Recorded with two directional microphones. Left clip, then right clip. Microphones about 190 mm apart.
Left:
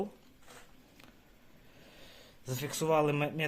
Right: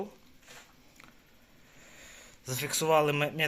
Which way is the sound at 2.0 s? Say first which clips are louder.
Right 5 dB; 25° left (ahead or behind).